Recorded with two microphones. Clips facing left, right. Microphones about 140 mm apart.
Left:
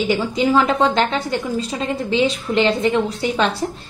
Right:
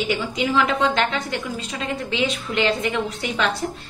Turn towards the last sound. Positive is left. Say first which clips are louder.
# left 4 dB
turn(degrees=30)  # may be behind; listen again after turning